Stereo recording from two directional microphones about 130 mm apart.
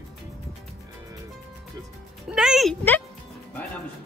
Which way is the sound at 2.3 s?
5° right (ahead or behind).